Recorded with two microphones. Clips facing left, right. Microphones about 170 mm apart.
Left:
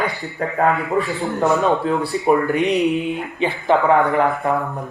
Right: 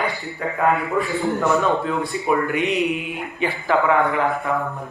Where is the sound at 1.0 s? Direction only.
30° left (ahead or behind).